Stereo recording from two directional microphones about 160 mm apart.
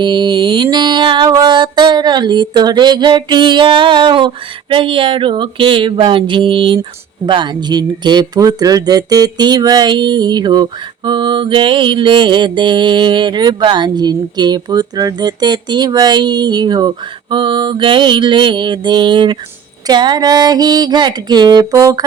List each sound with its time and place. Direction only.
0.0 s music: 30° right (ahead or behind)
4.7 s a sound: 35° right (ahead or behind)
7.3 s speech: 30° right (ahead or behind)